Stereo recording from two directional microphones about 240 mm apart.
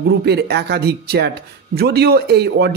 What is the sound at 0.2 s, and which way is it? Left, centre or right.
Speech, right.